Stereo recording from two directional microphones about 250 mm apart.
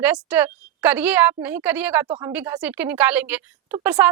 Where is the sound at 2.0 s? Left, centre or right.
Centre.